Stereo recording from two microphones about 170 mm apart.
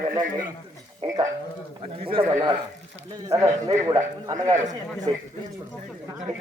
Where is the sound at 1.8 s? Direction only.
35° right (ahead or behind).